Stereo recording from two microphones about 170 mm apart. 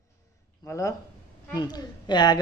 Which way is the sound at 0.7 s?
20° left (ahead or behind).